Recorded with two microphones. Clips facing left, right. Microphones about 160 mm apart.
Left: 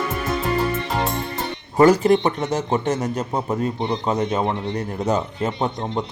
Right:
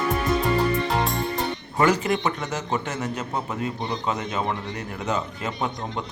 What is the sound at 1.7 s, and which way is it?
A man's voice, 35° left (ahead or behind).